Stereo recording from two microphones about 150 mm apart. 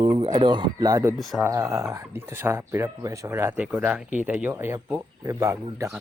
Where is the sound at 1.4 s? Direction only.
15° right (ahead or behind).